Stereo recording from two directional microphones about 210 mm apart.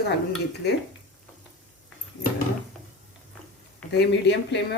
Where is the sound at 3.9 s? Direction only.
50° left (ahead or behind).